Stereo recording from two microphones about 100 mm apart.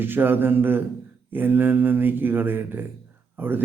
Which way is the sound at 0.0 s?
20° right (ahead or behind).